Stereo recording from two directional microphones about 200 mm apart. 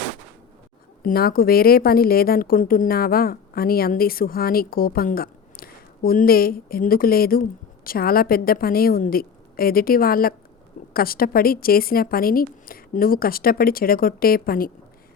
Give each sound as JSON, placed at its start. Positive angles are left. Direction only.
{"t": 1.0, "sound": "a woman's voice", "side_deg": 50}